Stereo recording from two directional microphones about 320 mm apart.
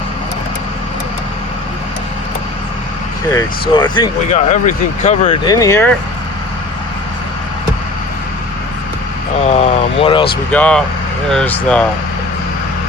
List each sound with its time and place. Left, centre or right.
3.3 s speech: centre
9.4 s speech: centre
10.5 s speech: centre